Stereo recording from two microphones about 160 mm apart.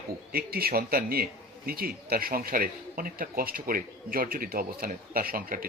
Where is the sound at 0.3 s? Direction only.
70° right (ahead or behind).